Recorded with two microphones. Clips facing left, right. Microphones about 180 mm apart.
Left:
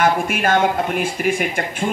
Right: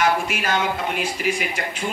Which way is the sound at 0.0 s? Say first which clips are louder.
Left 4 dB; 50° left (ahead or behind).